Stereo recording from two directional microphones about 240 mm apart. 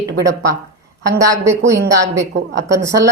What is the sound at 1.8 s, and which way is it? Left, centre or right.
Speech, right.